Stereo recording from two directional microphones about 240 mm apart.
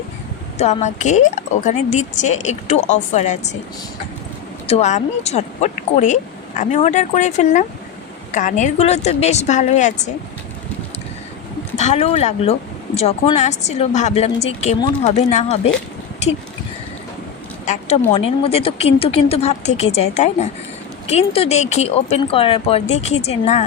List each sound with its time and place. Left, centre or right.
0.6 s speech: left
4.6 s speech: left
11.8 s speech: left
17.7 s speech: left